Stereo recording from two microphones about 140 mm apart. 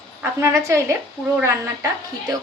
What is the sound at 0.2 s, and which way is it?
Speech, 20° right (ahead or behind).